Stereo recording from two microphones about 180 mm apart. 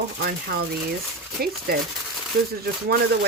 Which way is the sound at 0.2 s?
60° right (ahead or behind).